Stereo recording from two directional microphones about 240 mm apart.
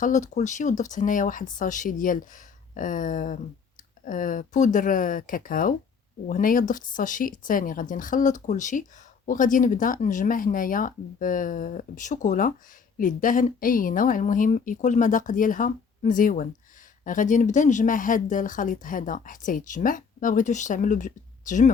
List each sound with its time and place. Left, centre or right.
0.0 s speech: left